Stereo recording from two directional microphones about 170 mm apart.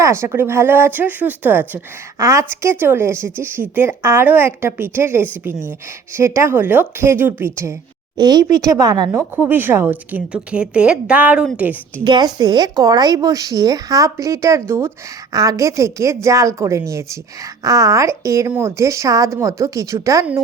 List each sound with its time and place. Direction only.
0.0 s speech: 15° right (ahead or behind)
12.0 s speech: 25° right (ahead or behind)